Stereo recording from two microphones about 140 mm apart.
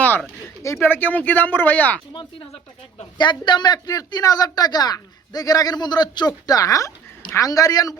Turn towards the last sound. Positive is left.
turn(degrees=25)  # may be behind; listen again after turning